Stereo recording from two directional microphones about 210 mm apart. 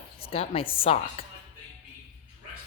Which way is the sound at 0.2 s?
25° left (ahead or behind).